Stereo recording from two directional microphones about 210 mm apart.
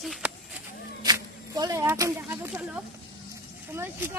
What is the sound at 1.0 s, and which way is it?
Speech, 20° right (ahead or behind).